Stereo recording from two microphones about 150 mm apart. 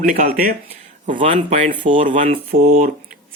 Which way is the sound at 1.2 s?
50° right (ahead or behind).